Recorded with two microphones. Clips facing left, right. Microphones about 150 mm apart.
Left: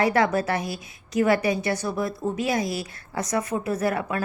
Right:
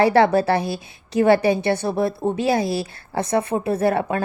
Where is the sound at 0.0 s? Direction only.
30° right (ahead or behind).